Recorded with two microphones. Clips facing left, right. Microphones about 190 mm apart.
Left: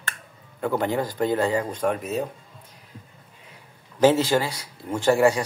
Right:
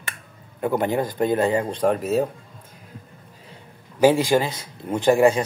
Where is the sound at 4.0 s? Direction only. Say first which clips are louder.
Right 2 dB; 15° right (ahead or behind).